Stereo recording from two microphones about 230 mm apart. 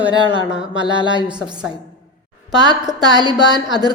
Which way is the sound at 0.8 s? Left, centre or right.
Right.